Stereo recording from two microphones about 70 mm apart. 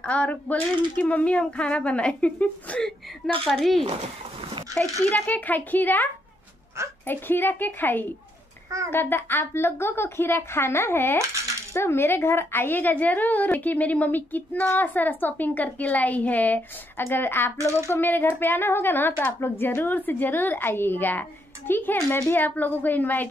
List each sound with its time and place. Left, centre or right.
0.0 s speech: centre
3.4 s a woman's voice: centre; by 6.0 s left
7.1 s a woman's voice: left